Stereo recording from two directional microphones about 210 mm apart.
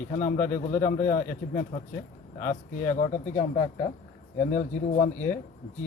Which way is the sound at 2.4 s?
40° left (ahead or behind).